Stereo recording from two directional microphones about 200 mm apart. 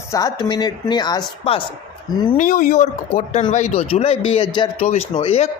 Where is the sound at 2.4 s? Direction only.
40° left (ahead or behind); by 4.7 s 25° left (ahead or behind).